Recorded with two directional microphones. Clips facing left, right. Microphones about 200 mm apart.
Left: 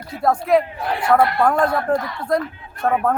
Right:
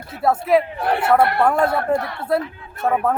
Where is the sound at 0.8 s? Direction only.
60° right (ahead or behind).